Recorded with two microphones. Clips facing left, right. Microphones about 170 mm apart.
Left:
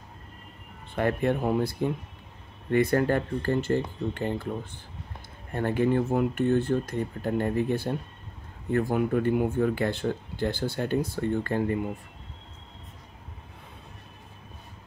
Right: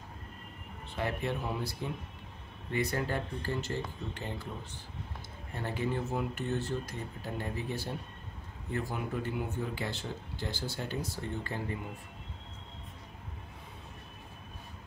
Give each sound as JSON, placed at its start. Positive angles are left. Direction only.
{"t": 0.9, "sound": "speech", "side_deg": 55}
{"t": 5.5, "sound": "speech", "side_deg": 55}